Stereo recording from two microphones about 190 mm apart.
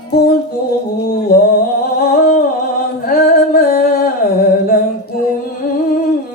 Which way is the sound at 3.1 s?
50° left (ahead or behind).